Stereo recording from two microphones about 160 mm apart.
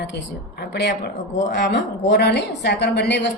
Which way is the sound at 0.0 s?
85° left.